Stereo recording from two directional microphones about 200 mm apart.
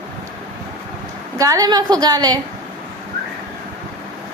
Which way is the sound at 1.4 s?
15° right (ahead or behind).